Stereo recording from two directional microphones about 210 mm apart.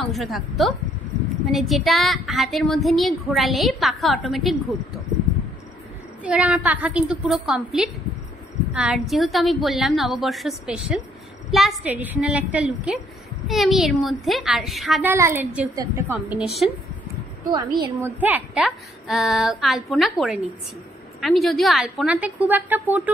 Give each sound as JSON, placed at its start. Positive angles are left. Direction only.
{"t": 0.0, "sound": "a woman's voice", "side_deg": 0}
{"t": 6.2, "sound": "a woman's voice", "side_deg": -5}
{"t": 15.1, "sound": "a woman's voice", "side_deg": -10}
{"t": 16.3, "sound": "a woman's voice", "side_deg": 0}
{"t": 17.5, "sound": "a woman's voice", "side_deg": -20}
{"t": 18.2, "sound": "a woman's voice", "side_deg": -5}